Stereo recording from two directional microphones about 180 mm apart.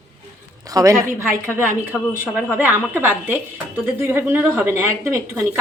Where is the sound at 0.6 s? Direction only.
20° right (ahead or behind).